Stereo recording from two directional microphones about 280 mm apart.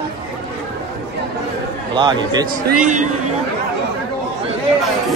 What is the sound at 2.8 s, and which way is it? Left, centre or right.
Speech, right.